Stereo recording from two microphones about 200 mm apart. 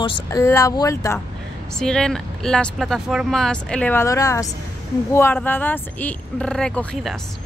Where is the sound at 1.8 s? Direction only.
5° left (ahead or behind).